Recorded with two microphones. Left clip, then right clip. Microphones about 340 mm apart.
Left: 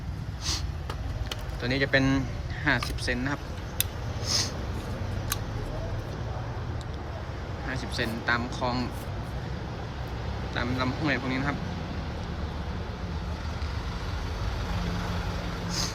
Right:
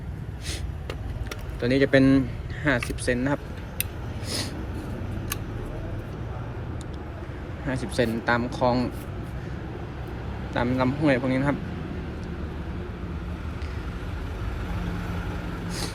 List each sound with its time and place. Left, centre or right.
1.6 s speech: centre
4.3 s a sound: centre
7.7 s speech: centre
10.5 s speech: centre